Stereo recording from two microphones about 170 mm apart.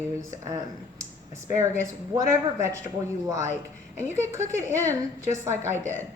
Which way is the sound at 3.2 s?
20° right (ahead or behind).